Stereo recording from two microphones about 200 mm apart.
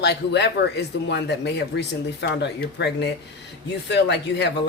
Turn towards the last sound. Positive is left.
turn(degrees=60)  # may be behind; listen again after turning